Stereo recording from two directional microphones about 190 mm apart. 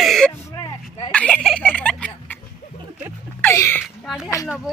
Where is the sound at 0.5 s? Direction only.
25° left (ahead or behind).